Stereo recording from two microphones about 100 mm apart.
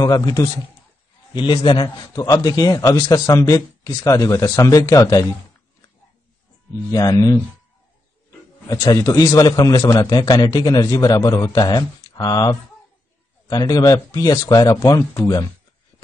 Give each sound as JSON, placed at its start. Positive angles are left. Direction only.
{"t": 0.0, "sound": "a man's voice", "side_deg": 45}
{"t": 2.1, "sound": "a man's voice", "side_deg": 40}
{"t": 6.9, "sound": "a man's voice", "side_deg": 35}
{"t": 8.6, "sound": "a man's voice", "side_deg": 35}